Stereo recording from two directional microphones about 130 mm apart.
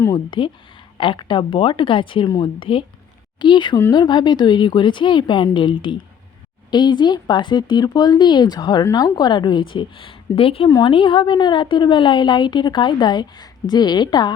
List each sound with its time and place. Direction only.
0.0 s speech: 35° left (ahead or behind)